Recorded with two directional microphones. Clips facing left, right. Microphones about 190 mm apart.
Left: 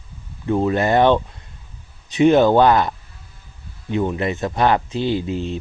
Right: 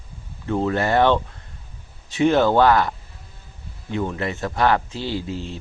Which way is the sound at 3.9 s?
20° left (ahead or behind).